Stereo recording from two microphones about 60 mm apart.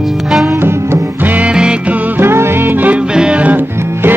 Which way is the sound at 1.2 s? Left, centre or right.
Right.